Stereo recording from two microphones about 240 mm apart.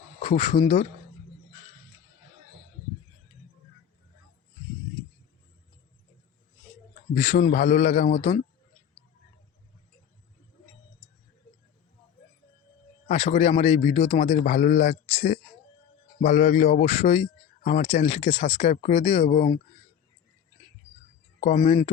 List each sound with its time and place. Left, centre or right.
0.2 s a man's voice: left
7.1 s a man's voice: left
13.1 s a man's voice: left
21.4 s a man's voice: left